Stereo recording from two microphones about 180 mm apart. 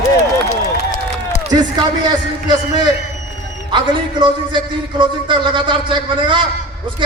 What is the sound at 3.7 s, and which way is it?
A man's voice, 25° right (ahead or behind).